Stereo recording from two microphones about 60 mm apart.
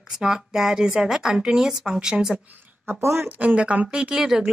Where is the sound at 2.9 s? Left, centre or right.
Right.